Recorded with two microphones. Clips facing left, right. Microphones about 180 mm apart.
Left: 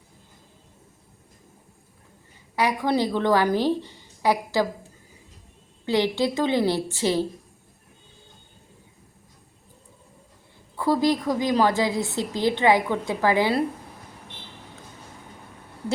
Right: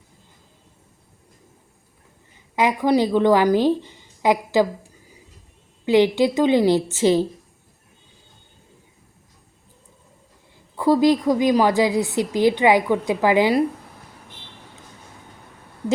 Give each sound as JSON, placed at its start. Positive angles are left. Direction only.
{"t": 2.6, "sound": "a woman's voice", "side_deg": -15}
{"t": 5.8, "sound": "a woman's voice", "side_deg": -15}
{"t": 10.8, "sound": "a woman's voice", "side_deg": -15}